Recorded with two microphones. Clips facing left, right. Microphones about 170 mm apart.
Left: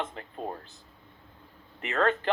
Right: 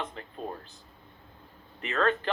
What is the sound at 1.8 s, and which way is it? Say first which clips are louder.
Speech: left 1 dB; 20° left (ahead or behind).